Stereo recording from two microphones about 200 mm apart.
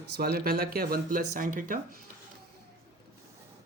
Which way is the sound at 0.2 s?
50° right (ahead or behind).